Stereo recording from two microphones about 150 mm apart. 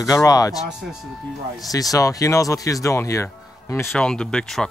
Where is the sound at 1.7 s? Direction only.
25° left (ahead or behind).